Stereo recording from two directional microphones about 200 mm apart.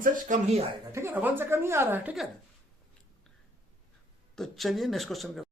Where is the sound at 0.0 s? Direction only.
35° right (ahead or behind).